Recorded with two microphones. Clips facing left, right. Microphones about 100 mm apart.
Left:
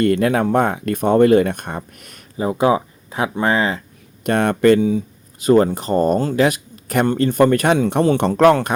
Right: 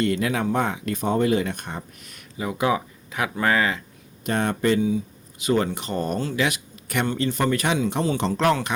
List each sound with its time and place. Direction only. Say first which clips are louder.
0.0 s speech: left 7 dB; 50° left (ahead or behind)
2.4 s speech: left 7 dB; 30° left (ahead or behind)
4.2 s speech: left 7 dB; 60° left (ahead or behind)
5.4 s speech: left 9 dB; 40° left (ahead or behind)